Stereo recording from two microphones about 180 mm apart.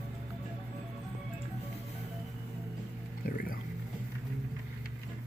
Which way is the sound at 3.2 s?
55° left (ahead or behind).